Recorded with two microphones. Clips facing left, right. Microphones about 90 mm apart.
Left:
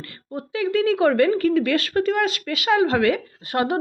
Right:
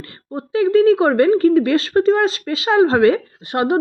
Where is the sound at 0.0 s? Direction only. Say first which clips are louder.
Right 4 dB; 30° right (ahead or behind).